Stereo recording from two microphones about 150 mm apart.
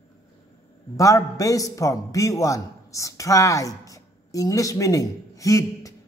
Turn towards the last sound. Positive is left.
turn(degrees=20)  # may be behind; listen again after turning